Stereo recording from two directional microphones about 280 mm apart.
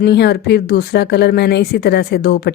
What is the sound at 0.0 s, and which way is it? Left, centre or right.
Speech, left.